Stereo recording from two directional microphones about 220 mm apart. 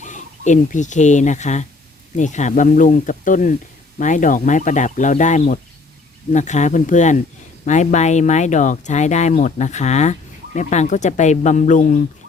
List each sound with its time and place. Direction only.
0.0 s speech: 35° left (ahead or behind)